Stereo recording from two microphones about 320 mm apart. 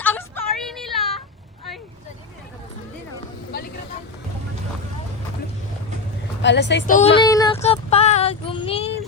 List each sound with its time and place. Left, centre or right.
0.0 s female singing: centre
3.5 s vehicle: left
6.4 s a woman's voice: left
7.2 s child singing: centre